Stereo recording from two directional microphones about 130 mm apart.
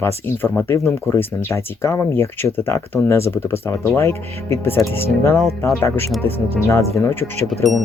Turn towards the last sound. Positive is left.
turn(degrees=0)  # may be behind; listen again after turning